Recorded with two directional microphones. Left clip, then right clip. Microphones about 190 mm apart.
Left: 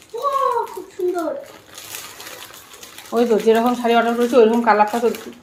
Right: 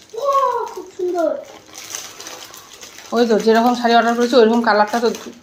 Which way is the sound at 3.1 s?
10° right (ahead or behind).